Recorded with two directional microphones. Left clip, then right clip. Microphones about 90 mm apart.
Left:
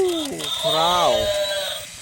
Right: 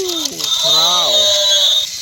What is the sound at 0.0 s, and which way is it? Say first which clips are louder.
Mechanisms: right 2 dB; 40° left (ahead or behind).